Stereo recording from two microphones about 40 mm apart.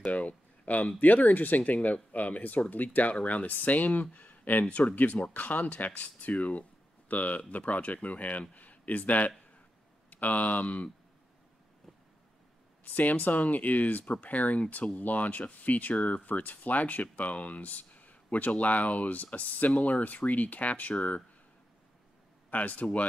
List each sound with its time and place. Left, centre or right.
0.0 s speech: left
4.6 s speech: left
12.8 s speech: left
22.5 s speech: left